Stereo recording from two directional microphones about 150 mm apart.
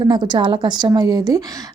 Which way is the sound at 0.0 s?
30° right (ahead or behind).